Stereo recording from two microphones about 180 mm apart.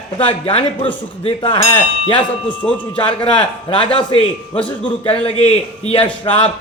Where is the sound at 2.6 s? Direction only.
5° left (ahead or behind).